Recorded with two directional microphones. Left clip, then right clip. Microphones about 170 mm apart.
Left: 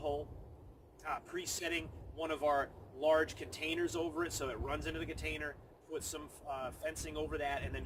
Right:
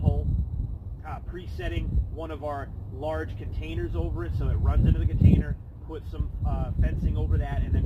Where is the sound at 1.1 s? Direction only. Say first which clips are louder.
Even; 20° left (ahead or behind).